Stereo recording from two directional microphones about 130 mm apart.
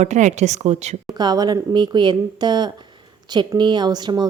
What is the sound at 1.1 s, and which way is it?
A woman's voice, 30° right (ahead or behind).